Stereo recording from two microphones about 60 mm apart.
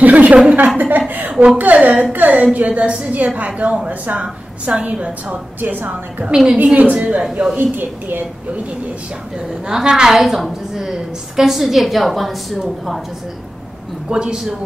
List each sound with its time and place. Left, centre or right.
0.0 s a sound: right
0.4 s a woman's voice: right
5.6 s a woman's voice: right
6.2 s a man's voice: centre
6.6 s a woman's voice: right
7.5 s a woman's voice: right
9.7 s a man's voice: centre
14.0 s a man's voice: centre